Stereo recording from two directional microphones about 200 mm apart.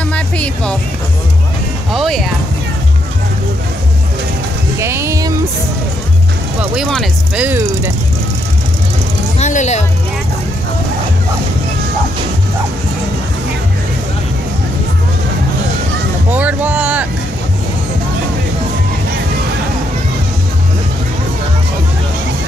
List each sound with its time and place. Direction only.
0.1 s music: 5° left (ahead or behind)
1.9 s speech: centre (ahead or behind)
4.7 s music: 15° right (ahead or behind)
6.6 s speech: 5° right (ahead or behind)
7.4 s speech: 10° right (ahead or behind)
9.4 s speech: 35° left (ahead or behind)
16.3 s speech: 10° right (ahead or behind)